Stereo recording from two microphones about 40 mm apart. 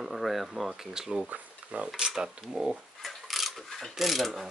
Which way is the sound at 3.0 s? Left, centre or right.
Centre.